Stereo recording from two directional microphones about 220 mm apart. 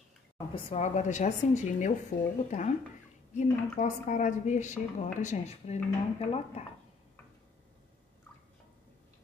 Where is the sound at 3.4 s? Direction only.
35° left (ahead or behind).